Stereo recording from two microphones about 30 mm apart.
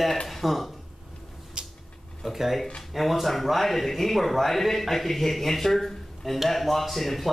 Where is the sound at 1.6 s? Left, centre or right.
Right.